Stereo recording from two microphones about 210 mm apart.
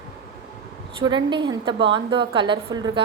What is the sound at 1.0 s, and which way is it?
A woman's voice, 20° right (ahead or behind).